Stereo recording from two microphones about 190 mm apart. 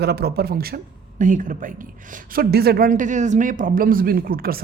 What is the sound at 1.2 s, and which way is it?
A woman's voice, 45° right (ahead or behind).